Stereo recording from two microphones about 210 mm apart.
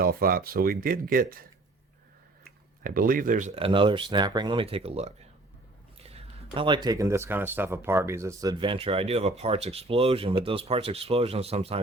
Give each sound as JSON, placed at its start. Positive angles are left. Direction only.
{"t": 0.0, "sound": "speech", "side_deg": -45}
{"t": 2.8, "sound": "speech", "side_deg": -40}